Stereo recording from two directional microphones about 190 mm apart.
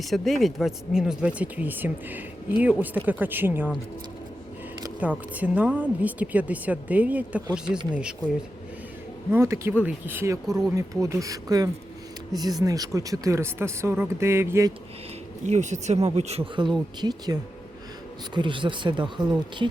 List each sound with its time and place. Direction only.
0.0 s a woman's voice: centre (ahead or behind)
4.9 s a woman's voice: 10° right (ahead or behind)
9.3 s a woman's voice: 15° right (ahead or behind)
10.8 s a woman's voice: 15° right (ahead or behind)
15.4 s speech: 40° right (ahead or behind)
17.0 s speech: 20° right (ahead or behind)